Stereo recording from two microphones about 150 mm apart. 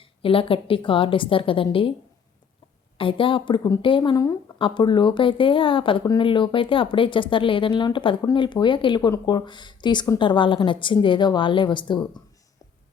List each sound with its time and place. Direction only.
0.0 s speech: 35° left (ahead or behind)
3.0 s speech: 35° left (ahead or behind)